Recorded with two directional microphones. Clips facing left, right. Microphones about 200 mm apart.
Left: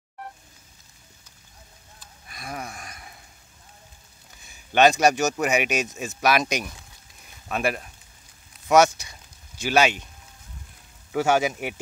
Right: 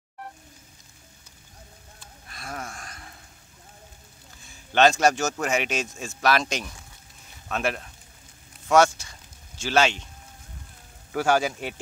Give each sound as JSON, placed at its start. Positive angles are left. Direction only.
{"t": 2.2, "sound": "a sound", "side_deg": 10}
{"t": 4.5, "sound": "speech", "side_deg": 15}
{"t": 11.1, "sound": "speech", "side_deg": 20}